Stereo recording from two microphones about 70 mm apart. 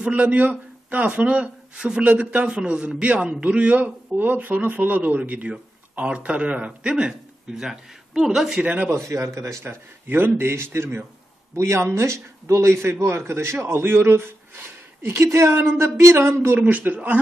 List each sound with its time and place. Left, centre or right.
0.0 s speech: right
8.6 s speech: right
8.9 s a man's voice: right
10.0 s a man's voice: right